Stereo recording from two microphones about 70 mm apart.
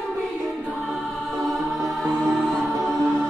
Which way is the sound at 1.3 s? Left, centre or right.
Centre.